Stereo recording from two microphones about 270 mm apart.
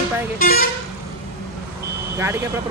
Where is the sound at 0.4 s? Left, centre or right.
Left.